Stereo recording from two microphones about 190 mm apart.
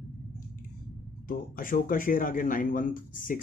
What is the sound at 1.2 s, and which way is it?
Speech, 45° left (ahead or behind).